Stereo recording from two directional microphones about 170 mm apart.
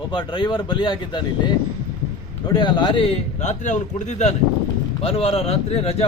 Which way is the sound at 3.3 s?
45° left (ahead or behind).